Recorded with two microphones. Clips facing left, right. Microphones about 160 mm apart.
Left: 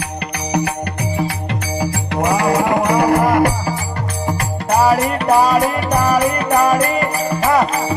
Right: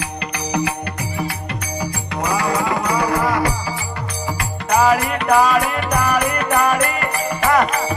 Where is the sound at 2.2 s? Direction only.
55° left (ahead or behind).